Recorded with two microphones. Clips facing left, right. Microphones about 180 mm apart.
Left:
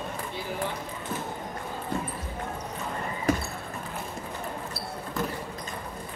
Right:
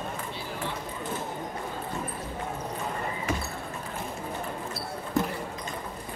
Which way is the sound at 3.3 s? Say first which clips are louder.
Left 6 dB; 35° left (ahead or behind).